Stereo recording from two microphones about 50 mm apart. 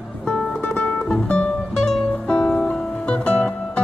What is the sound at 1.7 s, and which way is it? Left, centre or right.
Music, centre.